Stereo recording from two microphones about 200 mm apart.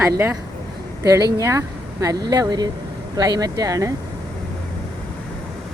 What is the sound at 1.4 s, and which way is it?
Speech, 15° right (ahead or behind).